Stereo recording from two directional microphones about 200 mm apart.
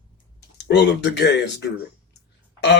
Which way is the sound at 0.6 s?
60° left (ahead or behind).